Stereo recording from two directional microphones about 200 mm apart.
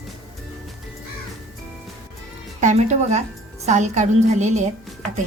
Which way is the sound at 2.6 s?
35° right (ahead or behind).